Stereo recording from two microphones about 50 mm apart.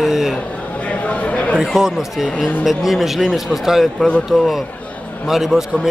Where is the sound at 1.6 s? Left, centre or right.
Centre.